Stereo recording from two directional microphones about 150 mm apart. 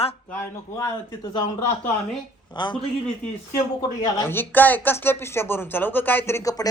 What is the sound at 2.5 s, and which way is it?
Speech, 30° left (ahead or behind).